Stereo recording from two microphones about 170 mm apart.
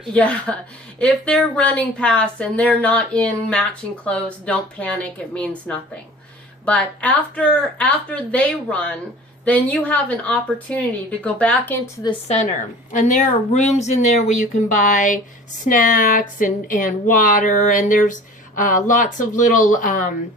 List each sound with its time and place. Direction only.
0.1 s a woman's voice: 5° left (ahead or behind)
12.3 s speech: 45° left (ahead or behind)